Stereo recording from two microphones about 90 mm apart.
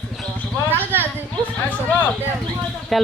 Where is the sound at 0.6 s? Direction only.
25° right (ahead or behind).